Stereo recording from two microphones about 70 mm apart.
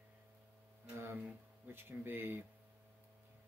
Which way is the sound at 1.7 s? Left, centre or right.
Right.